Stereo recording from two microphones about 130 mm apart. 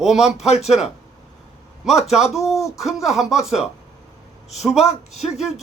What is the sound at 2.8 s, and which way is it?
A man's voice, centre (ahead or behind).